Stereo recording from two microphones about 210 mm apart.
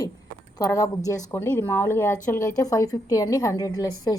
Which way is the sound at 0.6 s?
15° left (ahead or behind).